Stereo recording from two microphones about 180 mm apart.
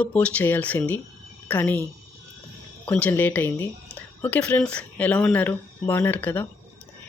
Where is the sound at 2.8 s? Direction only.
10° left (ahead or behind).